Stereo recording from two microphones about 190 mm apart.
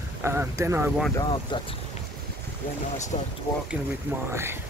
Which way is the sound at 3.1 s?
35° left (ahead or behind).